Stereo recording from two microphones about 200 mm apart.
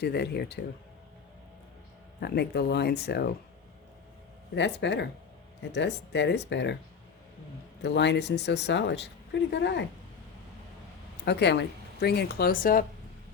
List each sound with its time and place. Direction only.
0.0 s a woman's voice: 55° left (ahead or behind)
2.2 s a woman's voice: 55° left (ahead or behind)
4.5 s a woman's voice: 60° left (ahead or behind)
7.8 s a woman's voice: 60° left (ahead or behind)
11.3 s a woman's voice: 55° left (ahead or behind)